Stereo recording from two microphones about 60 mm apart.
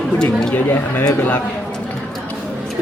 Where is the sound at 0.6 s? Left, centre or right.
Left.